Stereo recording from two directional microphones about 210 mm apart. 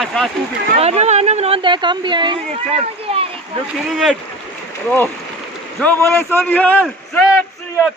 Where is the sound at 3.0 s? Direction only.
25° right (ahead or behind).